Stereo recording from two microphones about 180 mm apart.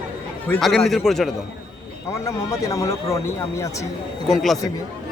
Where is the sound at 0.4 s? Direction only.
5° left (ahead or behind).